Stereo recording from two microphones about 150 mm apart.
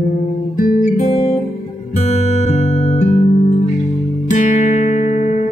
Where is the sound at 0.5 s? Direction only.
65° left (ahead or behind).